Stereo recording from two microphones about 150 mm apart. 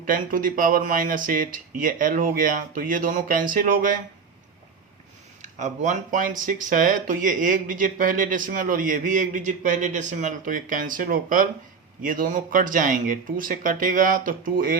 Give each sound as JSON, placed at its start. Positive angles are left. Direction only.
{"t": 0.0, "sound": "speech", "side_deg": -65}
{"t": 5.4, "sound": "speech", "side_deg": -55}